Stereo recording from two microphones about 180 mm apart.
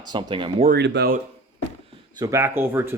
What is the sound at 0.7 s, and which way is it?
Speech, 70° right (ahead or behind).